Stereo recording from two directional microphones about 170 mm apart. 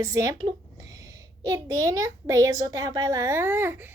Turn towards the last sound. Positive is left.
turn(degrees=-10)  # may be behind; listen again after turning